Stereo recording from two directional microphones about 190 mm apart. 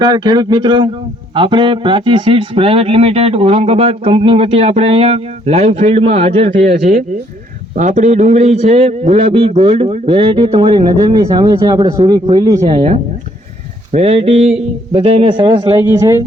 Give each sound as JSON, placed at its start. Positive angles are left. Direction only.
{"t": 0.0, "sound": "a man's voice", "side_deg": -25}
{"t": 13.9, "sound": "a man's voice", "side_deg": -35}